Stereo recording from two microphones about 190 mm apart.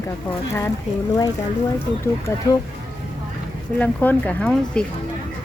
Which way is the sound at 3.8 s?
10° left (ahead or behind).